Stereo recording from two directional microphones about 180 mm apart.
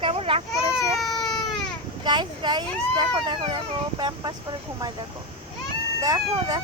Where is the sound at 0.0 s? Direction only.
30° right (ahead or behind).